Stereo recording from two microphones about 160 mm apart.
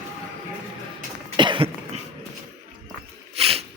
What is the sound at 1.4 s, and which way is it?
Cough, 30° right (ahead or behind).